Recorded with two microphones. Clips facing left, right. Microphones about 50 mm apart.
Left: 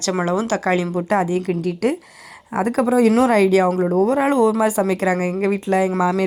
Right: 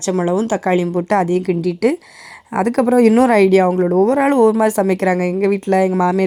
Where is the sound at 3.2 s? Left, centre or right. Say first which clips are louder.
Right 3 dB; right.